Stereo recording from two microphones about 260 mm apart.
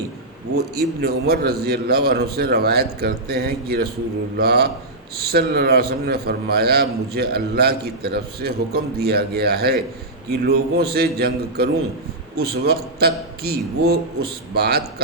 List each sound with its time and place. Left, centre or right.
0.5 s a man's voice: right